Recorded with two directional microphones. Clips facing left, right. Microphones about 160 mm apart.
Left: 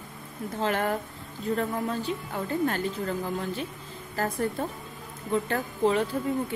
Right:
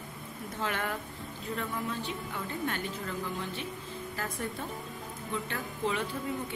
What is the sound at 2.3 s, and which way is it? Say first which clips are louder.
A woman's voice: left 9 dB; 40° left (ahead or behind).